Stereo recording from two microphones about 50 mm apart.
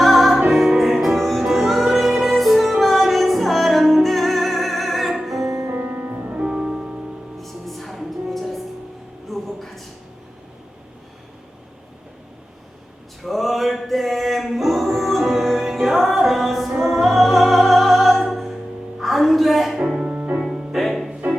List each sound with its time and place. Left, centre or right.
0.0 s music: centre
5.7 s music: right
6.4 s music: centre
7.3 s music: centre
9.3 s a sound: centre
13.2 s music: centre
16.6 s music: centre
16.9 s music: centre
20.4 s music: centre